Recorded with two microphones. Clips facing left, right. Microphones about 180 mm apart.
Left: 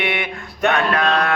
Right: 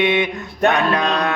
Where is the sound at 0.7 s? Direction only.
20° right (ahead or behind).